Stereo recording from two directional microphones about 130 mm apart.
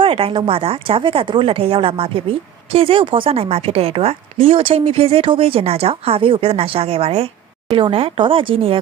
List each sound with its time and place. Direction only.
0.0 s a woman's voice: 45° right (ahead or behind)